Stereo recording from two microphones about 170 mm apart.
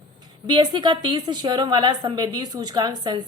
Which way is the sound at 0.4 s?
25° right (ahead or behind).